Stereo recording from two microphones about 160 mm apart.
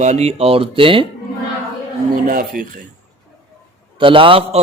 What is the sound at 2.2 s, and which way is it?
Speech, 60° right (ahead or behind).